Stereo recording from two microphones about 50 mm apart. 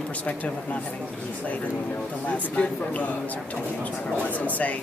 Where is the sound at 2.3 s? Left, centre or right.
Left.